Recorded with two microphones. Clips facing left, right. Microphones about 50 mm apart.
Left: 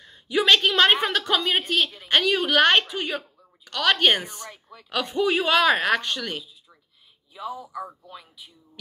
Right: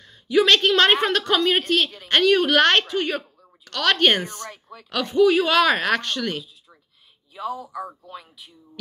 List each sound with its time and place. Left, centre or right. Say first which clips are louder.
0.0 s a sound: right 4 dB; left
0.6 s a woman's voice: right 2 dB; centre
5.0 s speech: right 6 dB; left
5.6 s a woman's voice: right 1 dB; centre